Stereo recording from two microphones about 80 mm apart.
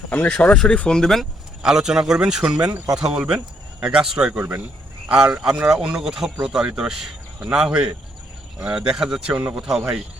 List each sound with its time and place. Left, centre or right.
0.1 s speech: left
0.6 s speech: centre
1.6 s speech: centre
4.4 s speech: right
5.0 s speech: centre
9.3 s speech: centre